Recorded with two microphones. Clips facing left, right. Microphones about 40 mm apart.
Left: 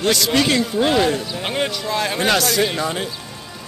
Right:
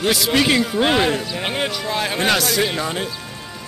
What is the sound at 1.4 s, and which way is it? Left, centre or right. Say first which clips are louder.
Speech: even; centre.